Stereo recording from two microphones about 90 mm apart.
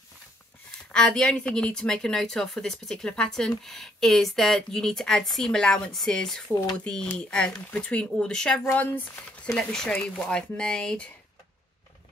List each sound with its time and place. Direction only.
0.9 s a woman's voice: 5° left (ahead or behind)
8.7 s speech: 20° left (ahead or behind)
9.6 s speech: 10° left (ahead or behind)